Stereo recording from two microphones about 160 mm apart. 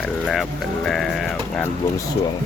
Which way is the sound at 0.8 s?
Centre (ahead or behind).